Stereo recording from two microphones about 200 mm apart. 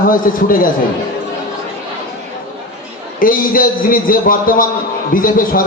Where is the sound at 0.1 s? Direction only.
45° left (ahead or behind).